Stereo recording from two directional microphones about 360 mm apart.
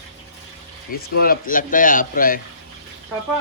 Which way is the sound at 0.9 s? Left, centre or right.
Left.